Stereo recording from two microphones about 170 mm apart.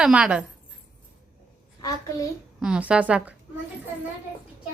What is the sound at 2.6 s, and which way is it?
Speech, 5° right (ahead or behind).